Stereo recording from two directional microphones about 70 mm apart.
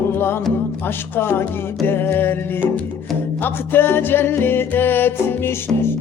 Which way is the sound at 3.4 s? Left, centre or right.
Left.